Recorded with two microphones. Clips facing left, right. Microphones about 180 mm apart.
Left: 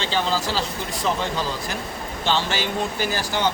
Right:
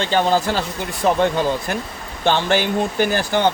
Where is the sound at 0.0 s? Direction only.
55° right (ahead or behind).